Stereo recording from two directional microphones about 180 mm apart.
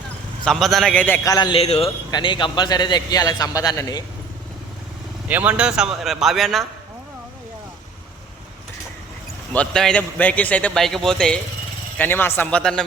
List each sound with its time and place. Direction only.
0.4 s a man's voice: centre (ahead or behind); by 4.0 s 20° left (ahead or behind)
5.3 s a man's voice: 5° right (ahead or behind)
9.5 s a man's voice: 5° left (ahead or behind)